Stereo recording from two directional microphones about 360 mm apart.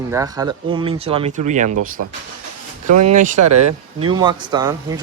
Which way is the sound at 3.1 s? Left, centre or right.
Right.